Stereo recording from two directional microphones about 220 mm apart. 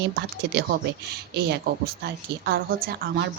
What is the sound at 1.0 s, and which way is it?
A woman's voice, 45° right (ahead or behind).